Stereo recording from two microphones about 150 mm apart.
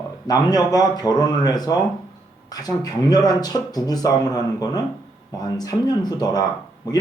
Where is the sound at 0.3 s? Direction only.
25° left (ahead or behind).